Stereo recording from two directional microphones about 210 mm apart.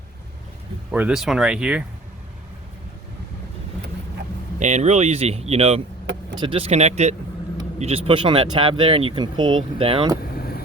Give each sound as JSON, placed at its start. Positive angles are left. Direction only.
{"t": 0.9, "sound": "speech", "side_deg": -5}
{"t": 4.6, "sound": "speech", "side_deg": -35}
{"t": 10.3, "sound": "vehicle", "side_deg": 45}